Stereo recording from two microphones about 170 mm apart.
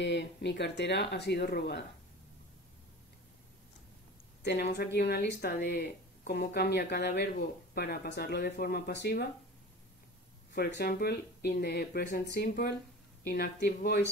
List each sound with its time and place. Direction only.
0.0 s speech: 90° left
4.4 s speech: 80° left
10.5 s speech: 65° left (ahead or behind)